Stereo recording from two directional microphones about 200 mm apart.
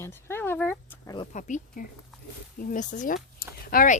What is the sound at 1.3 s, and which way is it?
Speech, 40° left (ahead or behind).